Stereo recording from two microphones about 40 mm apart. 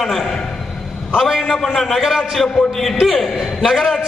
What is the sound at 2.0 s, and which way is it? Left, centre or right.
Speech, centre.